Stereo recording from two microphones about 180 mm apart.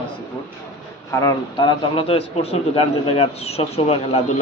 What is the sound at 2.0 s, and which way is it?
Speech, 30° left (ahead or behind).